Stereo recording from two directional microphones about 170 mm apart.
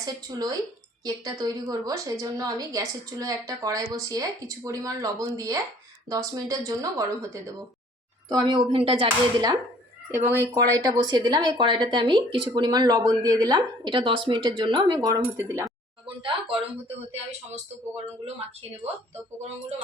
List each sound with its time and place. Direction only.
0.0 s speech: 25° right (ahead or behind)
10.1 s speech: 15° right (ahead or behind)
16.0 s speech: 30° right (ahead or behind)